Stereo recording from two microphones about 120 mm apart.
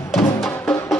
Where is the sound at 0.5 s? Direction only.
15° left (ahead or behind).